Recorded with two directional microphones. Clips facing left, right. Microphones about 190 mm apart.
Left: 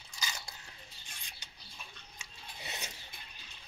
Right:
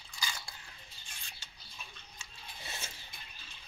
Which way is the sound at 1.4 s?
20° left (ahead or behind).